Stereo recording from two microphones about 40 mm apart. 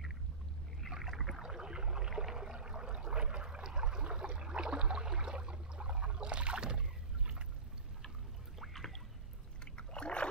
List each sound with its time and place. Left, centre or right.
0.9 s rowboat: centre
1.4 s a sound: centre
8.5 s boat: centre
9.8 s rowboat: left